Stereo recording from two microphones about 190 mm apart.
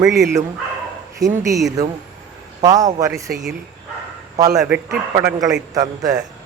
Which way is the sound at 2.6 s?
20° right (ahead or behind).